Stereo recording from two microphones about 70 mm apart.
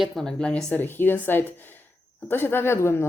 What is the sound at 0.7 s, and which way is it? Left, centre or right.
A woman's voice, left.